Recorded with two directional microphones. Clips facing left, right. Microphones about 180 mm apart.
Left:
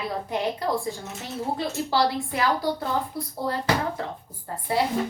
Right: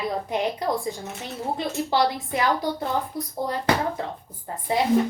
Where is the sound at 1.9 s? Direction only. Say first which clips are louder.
Right 1 dB; 20° right (ahead or behind).